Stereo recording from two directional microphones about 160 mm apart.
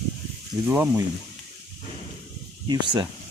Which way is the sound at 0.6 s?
10° right (ahead or behind).